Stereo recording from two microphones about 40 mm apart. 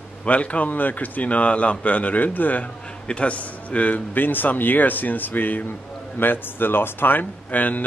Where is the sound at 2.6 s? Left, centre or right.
Left.